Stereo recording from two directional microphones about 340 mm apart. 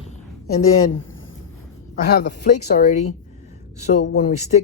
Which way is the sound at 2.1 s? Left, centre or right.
Left.